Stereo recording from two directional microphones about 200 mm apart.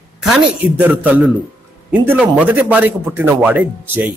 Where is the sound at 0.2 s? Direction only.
5° right (ahead or behind).